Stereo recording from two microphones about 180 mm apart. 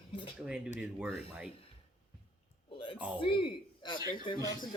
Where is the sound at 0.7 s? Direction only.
5° right (ahead or behind).